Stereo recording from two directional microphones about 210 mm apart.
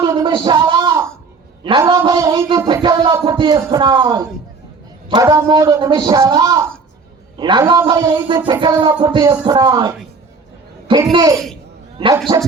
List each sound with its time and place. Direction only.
0.0 s a sound: 25° right (ahead or behind)
1.6 s music: 20° right (ahead or behind)
5.0 s a man's voice: 15° right (ahead or behind)
7.3 s music: 20° right (ahead or behind)